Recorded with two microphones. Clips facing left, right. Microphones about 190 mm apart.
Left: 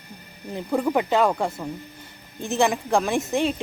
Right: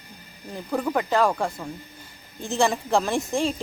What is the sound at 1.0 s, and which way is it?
Speech, 20° left (ahead or behind).